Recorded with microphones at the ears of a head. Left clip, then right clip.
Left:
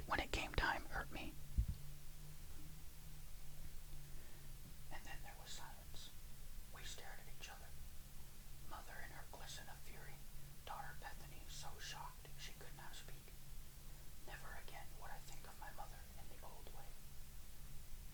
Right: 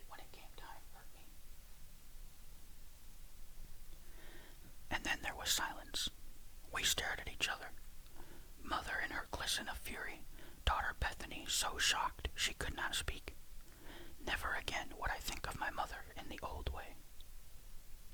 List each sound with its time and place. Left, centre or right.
0.1 s whispering: left
4.9 s whispering: right